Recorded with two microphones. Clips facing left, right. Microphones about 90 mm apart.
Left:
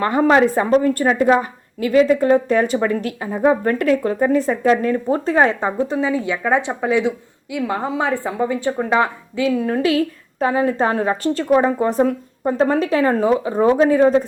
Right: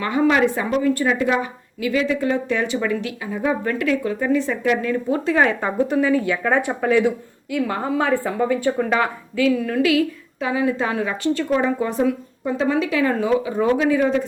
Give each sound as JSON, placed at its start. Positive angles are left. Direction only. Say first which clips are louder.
{"t": 0.0, "sound": "a woman's voice", "louder": "left 3 dB", "side_deg": 40}